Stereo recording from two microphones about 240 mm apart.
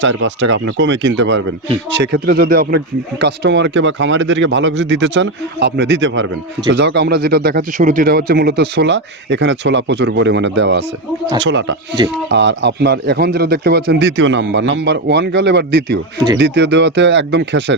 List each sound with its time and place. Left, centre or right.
0.2 s speech: right
2.2 s speech: right